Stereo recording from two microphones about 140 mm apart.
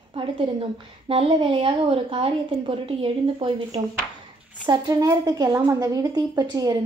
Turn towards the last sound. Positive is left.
turn(degrees=-30)  # may be behind; listen again after turning